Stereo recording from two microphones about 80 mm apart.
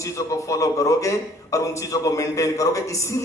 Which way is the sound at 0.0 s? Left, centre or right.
Left.